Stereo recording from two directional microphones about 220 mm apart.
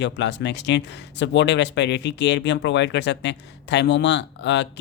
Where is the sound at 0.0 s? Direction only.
55° left (ahead or behind).